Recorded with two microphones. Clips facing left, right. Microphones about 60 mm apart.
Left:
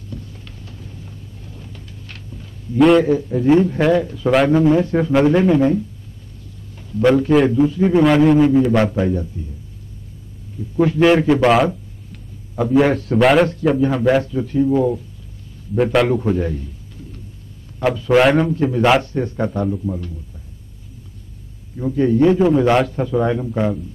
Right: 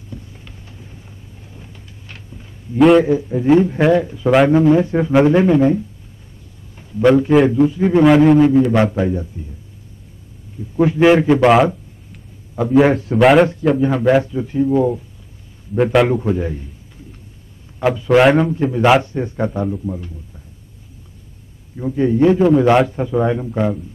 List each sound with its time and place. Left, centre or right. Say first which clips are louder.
0.1 s vehicle: left 1 dB; centre
2.8 s a man's voice: right 1 dB; centre
7.0 s a man's voice: right 2 dB; centre
10.8 s a man's voice: right 2 dB; centre
14.2 s a man's voice: even; centre
18.1 s a man's voice: right 2 dB; centre
21.7 s a man's voice: even; centre